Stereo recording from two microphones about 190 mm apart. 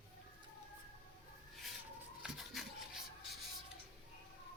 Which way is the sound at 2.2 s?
Centre (ahead or behind).